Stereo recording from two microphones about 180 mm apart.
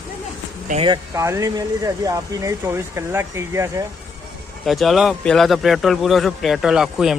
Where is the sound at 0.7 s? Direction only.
25° right (ahead or behind).